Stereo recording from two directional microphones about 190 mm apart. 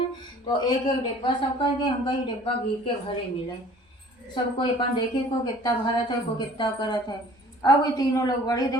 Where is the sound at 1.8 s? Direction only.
25° left (ahead or behind).